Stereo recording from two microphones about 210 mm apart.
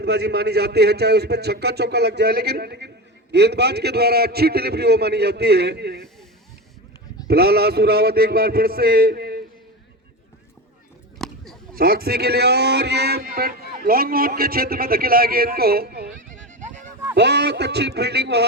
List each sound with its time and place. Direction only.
0.0 s speech: 50° right (ahead or behind)
7.3 s speech: 50° right (ahead or behind)
11.2 s a sound: centre (ahead or behind)
11.8 s speech: 45° right (ahead or behind)
17.2 s speech: 55° right (ahead or behind)